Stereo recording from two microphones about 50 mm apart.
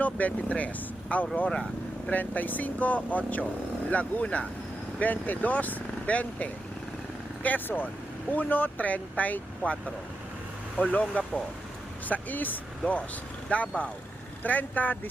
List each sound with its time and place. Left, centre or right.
0.0 s speech: left
12.8 s speech: left